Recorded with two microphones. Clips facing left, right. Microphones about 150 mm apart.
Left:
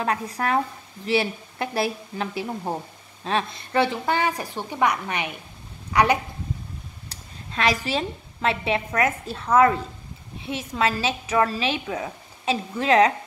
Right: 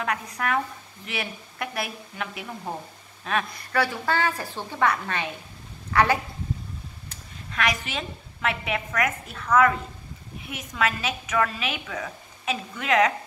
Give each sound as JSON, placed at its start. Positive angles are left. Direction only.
{"t": 0.0, "sound": "a woman's voice", "side_deg": 30}
{"t": 7.1, "sound": "a woman's voice", "side_deg": 30}